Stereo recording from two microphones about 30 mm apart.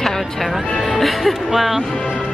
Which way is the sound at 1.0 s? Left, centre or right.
Centre.